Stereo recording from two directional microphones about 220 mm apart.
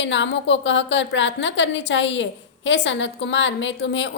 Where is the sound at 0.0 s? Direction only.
55° left (ahead or behind).